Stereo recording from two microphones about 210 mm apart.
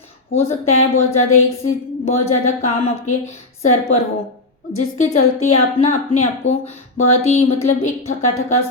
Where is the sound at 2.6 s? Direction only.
30° left (ahead or behind).